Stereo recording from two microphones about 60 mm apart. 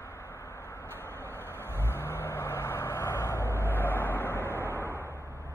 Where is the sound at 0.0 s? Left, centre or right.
Left.